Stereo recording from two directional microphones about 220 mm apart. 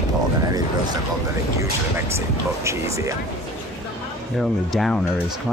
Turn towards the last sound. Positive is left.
turn(degrees=0)  # may be behind; listen again after turning